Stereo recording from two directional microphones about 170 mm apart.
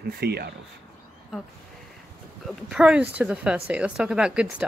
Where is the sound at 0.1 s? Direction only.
70° right (ahead or behind).